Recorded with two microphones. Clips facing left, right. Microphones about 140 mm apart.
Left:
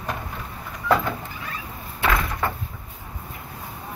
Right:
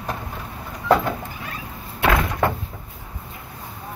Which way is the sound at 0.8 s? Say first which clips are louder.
Right 3 dB; 35° right (ahead or behind).